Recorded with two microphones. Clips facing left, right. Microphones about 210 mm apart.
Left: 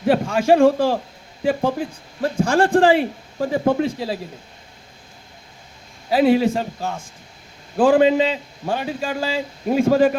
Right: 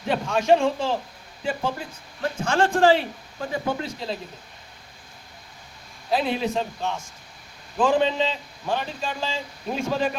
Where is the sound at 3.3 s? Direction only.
40° left (ahead or behind).